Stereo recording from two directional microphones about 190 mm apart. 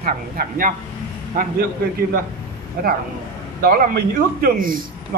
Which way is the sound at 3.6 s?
50° right (ahead or behind).